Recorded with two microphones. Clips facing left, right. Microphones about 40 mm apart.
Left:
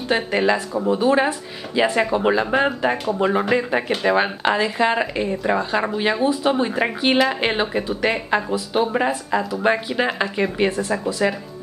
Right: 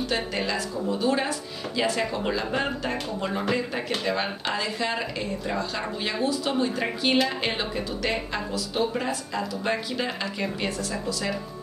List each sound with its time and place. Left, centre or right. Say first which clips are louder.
0.1 s speech: left 13 dB; left